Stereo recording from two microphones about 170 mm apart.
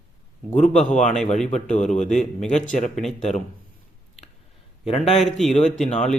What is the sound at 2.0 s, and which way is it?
Speech, 5° left (ahead or behind).